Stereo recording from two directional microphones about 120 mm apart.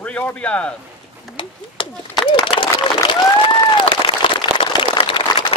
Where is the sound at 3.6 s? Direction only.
45° left (ahead or behind).